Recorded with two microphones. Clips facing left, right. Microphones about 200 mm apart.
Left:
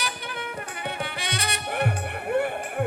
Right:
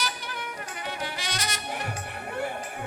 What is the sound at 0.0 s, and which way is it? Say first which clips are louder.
Music: left 2 dB; 60° left (ahead or behind).